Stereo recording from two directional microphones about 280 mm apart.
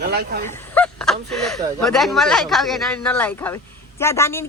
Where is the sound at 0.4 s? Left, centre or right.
Centre.